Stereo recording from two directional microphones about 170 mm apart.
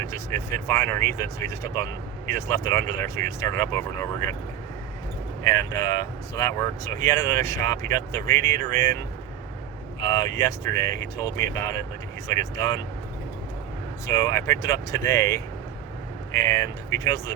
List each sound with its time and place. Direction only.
0.0 s speech: 15° left (ahead or behind)
5.4 s speech: 20° left (ahead or behind)
10.0 s speech: 20° left (ahead or behind)
14.1 s speech: 20° left (ahead or behind)